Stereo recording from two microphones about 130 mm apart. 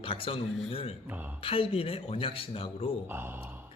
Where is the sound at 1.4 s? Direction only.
45° left (ahead or behind).